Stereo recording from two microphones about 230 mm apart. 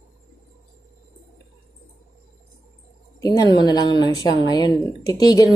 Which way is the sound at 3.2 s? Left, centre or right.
Centre.